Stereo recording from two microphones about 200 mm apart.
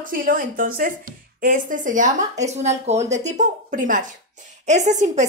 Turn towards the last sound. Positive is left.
turn(degrees=-35)  # may be behind; listen again after turning